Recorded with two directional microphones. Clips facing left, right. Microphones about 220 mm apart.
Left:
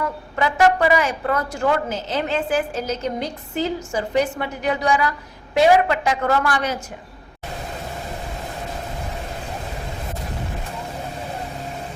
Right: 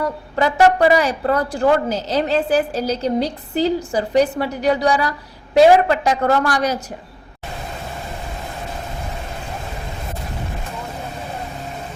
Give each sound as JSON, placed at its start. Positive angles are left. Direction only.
{"t": 0.3, "sound": "a woman's voice", "side_deg": -35}